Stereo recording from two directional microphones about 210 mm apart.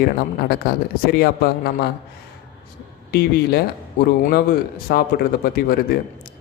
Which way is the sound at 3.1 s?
50° left (ahead or behind).